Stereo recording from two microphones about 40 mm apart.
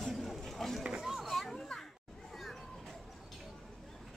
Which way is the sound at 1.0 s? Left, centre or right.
Centre.